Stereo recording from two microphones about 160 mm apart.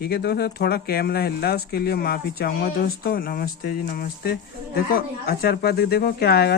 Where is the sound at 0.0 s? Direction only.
90° left.